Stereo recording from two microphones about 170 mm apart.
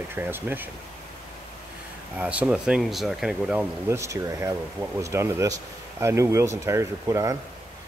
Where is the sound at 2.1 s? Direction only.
10° right (ahead or behind).